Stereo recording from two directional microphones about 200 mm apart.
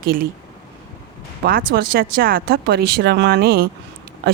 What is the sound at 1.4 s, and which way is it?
Speech, 50° right (ahead or behind).